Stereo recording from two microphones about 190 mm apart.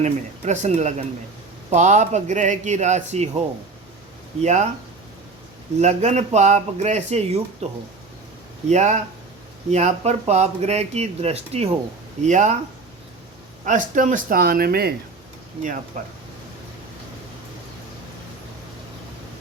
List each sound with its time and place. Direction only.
0.0 s speech: 40° right (ahead or behind)
4.4 s speech: 35° right (ahead or behind)
5.8 s speech: 35° right (ahead or behind)
13.7 s speech: 40° right (ahead or behind)
15.9 s speech: 45° right (ahead or behind)